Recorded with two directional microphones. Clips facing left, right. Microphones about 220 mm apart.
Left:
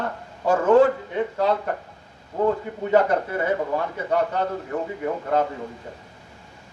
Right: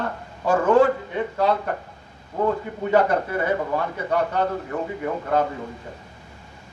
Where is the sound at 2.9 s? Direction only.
20° left (ahead or behind).